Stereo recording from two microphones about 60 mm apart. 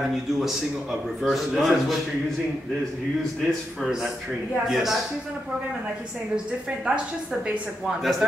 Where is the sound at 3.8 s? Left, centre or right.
Centre.